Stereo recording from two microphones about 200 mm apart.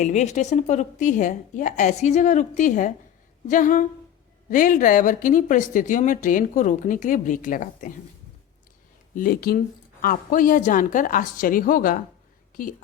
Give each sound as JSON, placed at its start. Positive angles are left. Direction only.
{"t": 0.0, "sound": "speech", "side_deg": 35}
{"t": 9.1, "sound": "a woman's voice", "side_deg": 45}